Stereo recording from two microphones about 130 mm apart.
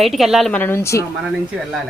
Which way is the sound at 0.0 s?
Centre (ahead or behind).